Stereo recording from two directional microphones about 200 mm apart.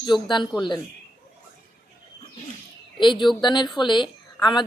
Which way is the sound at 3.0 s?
25° left (ahead or behind).